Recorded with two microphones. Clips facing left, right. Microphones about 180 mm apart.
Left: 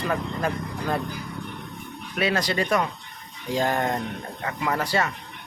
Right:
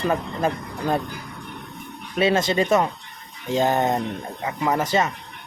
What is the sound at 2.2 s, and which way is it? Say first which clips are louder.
Speech: right 5 dB; 25° right (ahead or behind).